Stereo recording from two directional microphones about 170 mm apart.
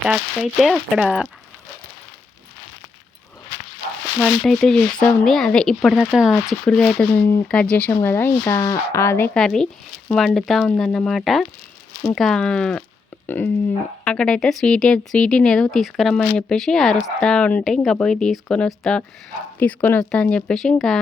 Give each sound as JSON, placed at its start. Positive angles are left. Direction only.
{"t": 0.1, "sound": "speech", "side_deg": 0}
{"t": 4.2, "sound": "speech", "side_deg": 0}
{"t": 7.1, "sound": "speech", "side_deg": 15}
{"t": 7.4, "sound": "speech", "side_deg": 5}